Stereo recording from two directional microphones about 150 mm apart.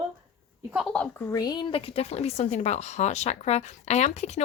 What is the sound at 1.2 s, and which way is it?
Speech, 25° left (ahead or behind).